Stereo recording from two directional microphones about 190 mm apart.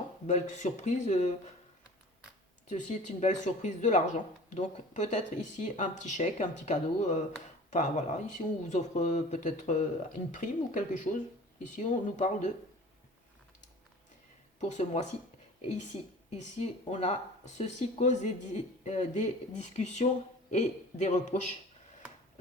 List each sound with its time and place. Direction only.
0.3 s speech: 40° left (ahead or behind)
2.6 s speech: 40° left (ahead or behind)
14.6 s speech: 40° left (ahead or behind)